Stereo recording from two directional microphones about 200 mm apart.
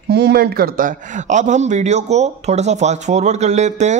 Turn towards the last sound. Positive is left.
turn(degrees=-35)  # may be behind; listen again after turning